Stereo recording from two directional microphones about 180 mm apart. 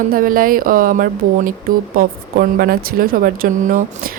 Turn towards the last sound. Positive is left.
turn(degrees=-55)  # may be behind; listen again after turning